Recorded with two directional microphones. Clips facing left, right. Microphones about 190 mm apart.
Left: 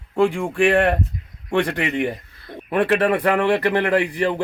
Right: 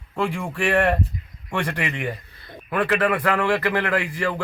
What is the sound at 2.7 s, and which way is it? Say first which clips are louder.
A man's voice: left 3 dB; 25° left (ahead or behind).